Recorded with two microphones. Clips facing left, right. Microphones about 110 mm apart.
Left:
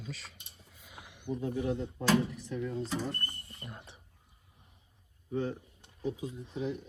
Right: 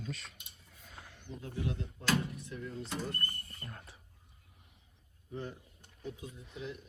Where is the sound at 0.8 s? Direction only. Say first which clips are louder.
Left 1 dB; 10° left (ahead or behind).